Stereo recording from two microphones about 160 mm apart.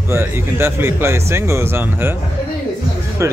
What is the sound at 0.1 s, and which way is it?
Speech, 15° right (ahead or behind).